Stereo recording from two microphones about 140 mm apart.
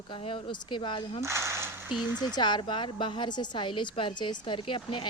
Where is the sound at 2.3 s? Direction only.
30° left (ahead or behind).